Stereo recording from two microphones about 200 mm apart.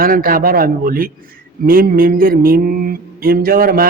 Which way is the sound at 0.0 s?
45° right (ahead or behind).